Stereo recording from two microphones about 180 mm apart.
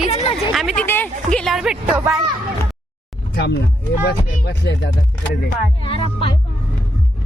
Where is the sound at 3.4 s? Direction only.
65° left (ahead or behind).